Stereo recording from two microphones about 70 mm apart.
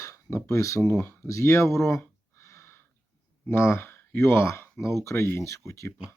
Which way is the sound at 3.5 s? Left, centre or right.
Left.